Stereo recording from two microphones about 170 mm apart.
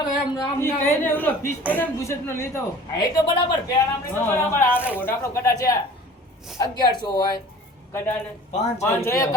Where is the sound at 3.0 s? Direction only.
25° left (ahead or behind).